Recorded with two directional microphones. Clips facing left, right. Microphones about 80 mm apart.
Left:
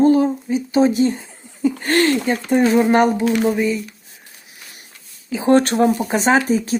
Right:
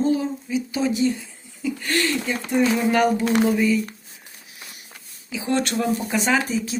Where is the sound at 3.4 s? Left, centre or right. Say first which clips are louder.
Left 1 dB; left.